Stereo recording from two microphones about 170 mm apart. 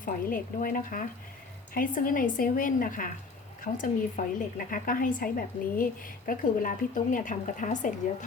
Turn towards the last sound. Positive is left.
turn(degrees=50)  # may be behind; listen again after turning